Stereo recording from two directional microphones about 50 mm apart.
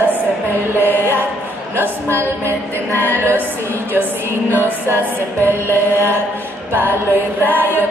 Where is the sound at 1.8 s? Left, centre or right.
Right.